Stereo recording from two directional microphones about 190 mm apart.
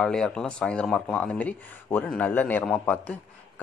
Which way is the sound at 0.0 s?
5° left (ahead or behind).